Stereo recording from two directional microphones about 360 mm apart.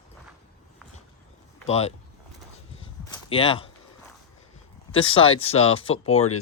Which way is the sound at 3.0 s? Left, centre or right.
Centre.